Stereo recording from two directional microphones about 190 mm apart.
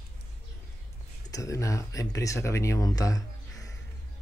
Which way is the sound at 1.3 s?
15° left (ahead or behind).